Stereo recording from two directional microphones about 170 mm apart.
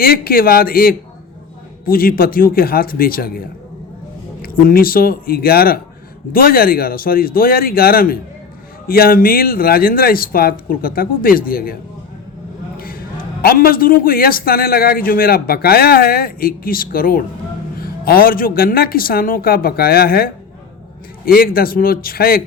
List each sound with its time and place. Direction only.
0.0 s a man's voice: 60° left (ahead or behind)
4.4 s a man's voice: 60° left (ahead or behind)
12.7 s a sound: 60° left (ahead or behind)
13.4 s a man's voice: 60° left (ahead or behind)